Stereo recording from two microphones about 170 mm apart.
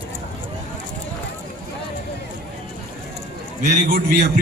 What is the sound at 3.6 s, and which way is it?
Speech, 50° right (ahead or behind).